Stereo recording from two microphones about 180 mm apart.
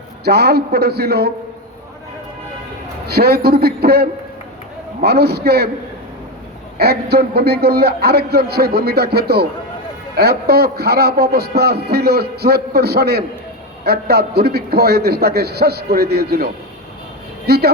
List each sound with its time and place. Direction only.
0.3 s a man's voice: 65° right (ahead or behind)
3.1 s a man's voice: 60° right (ahead or behind)
5.0 s a man's voice: 60° right (ahead or behind)
6.7 s a man's voice: 60° right (ahead or behind)